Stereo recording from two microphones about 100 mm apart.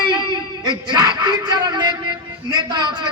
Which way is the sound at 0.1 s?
50° right (ahead or behind).